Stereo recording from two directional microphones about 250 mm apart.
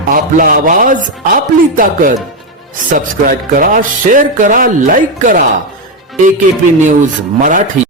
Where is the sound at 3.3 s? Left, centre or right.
Right.